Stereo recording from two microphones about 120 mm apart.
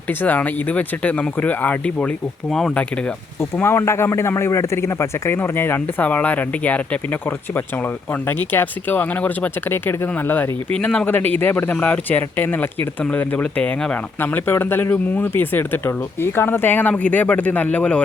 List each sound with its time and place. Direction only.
0.1 s speech: 15° left (ahead or behind)
3.6 s a man's voice: 20° left (ahead or behind)